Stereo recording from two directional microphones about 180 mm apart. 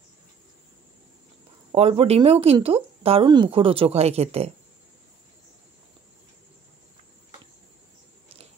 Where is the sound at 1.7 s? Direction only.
35° right (ahead or behind).